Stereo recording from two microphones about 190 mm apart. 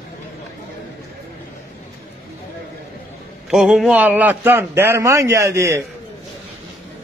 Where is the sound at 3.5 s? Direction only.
5° right (ahead or behind).